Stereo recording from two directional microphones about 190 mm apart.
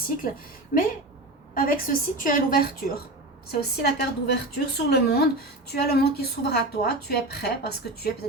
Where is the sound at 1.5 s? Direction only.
50° left (ahead or behind).